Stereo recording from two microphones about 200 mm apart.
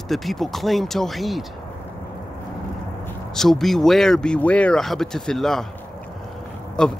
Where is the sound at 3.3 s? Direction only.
Centre (ahead or behind).